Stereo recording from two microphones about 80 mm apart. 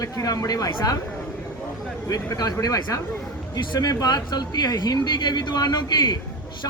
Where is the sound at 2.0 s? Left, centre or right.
Left.